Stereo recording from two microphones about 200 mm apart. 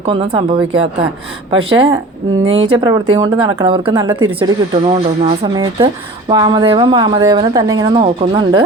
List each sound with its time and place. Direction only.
0.0 s speech: 25° right (ahead or behind)